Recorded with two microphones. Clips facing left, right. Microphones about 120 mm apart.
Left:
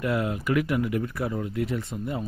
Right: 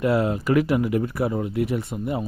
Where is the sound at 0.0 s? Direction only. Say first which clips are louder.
Right 5 dB; 30° right (ahead or behind).